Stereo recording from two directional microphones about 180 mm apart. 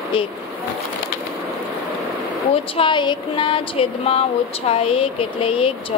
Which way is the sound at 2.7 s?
25° left (ahead or behind).